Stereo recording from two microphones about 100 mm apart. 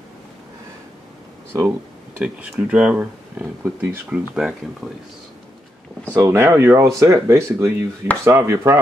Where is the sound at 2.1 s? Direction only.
10° right (ahead or behind).